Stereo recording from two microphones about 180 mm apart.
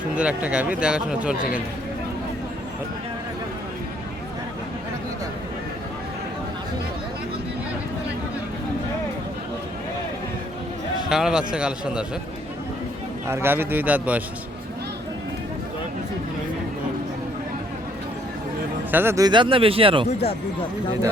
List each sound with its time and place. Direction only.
0.1 s speech: 5° right (ahead or behind)
11.1 s speech: 5° right (ahead or behind)
13.2 s speech: 15° right (ahead or behind)
18.9 s speech: 10° right (ahead or behind); by 20.1 s 30° right (ahead or behind)